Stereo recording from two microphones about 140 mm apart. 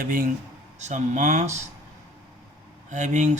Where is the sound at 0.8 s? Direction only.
60° right (ahead or behind).